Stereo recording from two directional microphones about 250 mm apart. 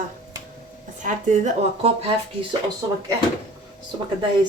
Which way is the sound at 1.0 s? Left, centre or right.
Right.